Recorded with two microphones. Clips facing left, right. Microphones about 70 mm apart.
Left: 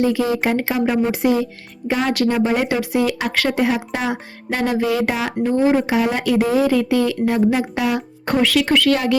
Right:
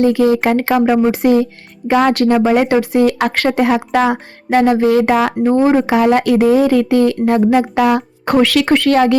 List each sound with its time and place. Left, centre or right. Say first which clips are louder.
0.0 s speech: right 6 dB; right
8.6 s speech: right 5 dB; right